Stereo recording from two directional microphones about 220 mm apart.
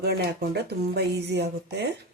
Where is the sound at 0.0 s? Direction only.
45° right (ahead or behind).